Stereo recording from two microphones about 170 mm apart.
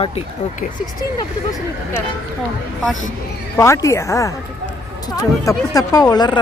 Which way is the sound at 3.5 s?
20° left (ahead or behind).